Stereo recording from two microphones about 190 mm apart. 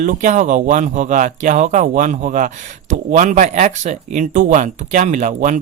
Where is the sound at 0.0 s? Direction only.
40° right (ahead or behind).